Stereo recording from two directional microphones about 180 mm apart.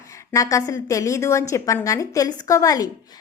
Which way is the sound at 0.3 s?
15° left (ahead or behind).